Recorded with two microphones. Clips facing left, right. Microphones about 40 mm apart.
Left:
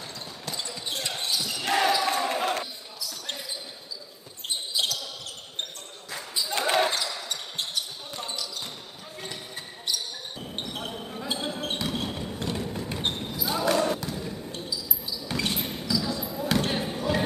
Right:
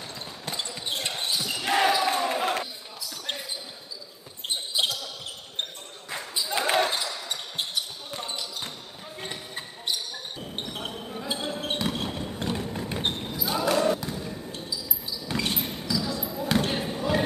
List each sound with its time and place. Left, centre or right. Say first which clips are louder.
0.5 s basketball bounce: right 2 dB; right
1.6 s basketball bounce: right 1 dB; centre
2.2 s a sound: right 1 dB; centre
4.7 s basketball bounce: right 2 dB; right
6.5 s basketball bounce: even; centre; by 9.9 s right
10.4 s basketball bounce: left 1 dB; centre